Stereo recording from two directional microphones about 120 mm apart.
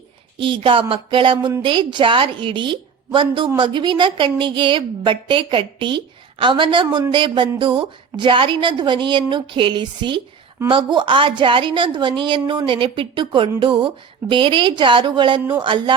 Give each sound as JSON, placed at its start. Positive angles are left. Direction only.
{"t": 0.3, "sound": "a woman's voice", "side_deg": -45}